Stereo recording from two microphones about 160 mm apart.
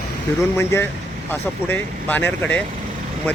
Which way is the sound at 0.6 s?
15° left (ahead or behind).